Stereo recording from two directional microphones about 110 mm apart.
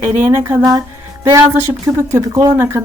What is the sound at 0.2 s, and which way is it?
Speech, 25° right (ahead or behind).